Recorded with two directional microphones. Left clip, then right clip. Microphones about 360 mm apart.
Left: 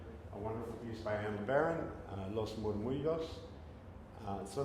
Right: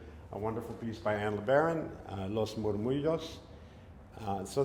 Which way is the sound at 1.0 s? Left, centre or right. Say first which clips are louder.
Right 7 dB; right.